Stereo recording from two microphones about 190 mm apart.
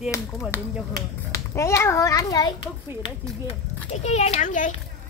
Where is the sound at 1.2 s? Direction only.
15° left (ahead or behind).